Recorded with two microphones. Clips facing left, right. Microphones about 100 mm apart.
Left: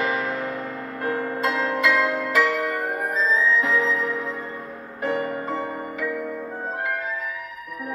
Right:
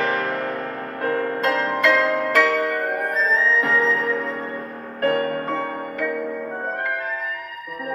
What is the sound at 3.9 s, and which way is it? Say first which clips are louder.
Music: right 3 dB; 50° right (ahead or behind).